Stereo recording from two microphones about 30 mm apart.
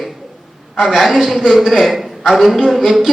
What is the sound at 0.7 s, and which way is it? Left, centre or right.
Speech, centre.